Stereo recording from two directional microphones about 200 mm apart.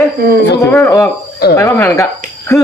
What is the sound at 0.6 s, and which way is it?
Speech, 15° left (ahead or behind).